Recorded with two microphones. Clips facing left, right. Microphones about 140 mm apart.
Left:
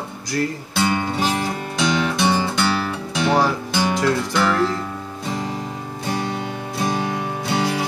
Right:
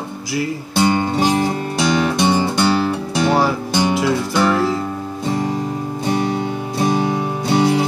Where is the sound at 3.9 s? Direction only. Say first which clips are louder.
Right 2 dB; 10° right (ahead or behind).